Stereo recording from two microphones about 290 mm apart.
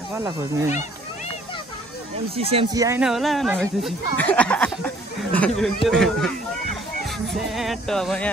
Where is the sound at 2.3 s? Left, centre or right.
Centre.